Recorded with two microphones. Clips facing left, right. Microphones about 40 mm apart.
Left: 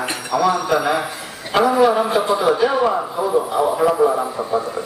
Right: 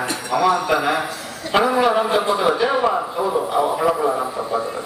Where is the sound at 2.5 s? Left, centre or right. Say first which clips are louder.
Left 2 dB; centre.